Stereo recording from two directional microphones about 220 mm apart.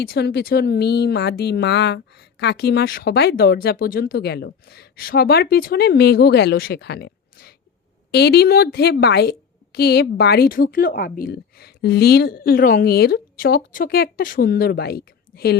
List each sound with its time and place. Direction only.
0.0 s speech: 45° left (ahead or behind)